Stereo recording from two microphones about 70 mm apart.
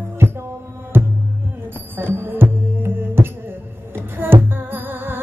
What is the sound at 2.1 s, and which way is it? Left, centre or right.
Music, right.